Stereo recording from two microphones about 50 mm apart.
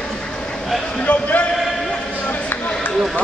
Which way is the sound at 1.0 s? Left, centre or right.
Left.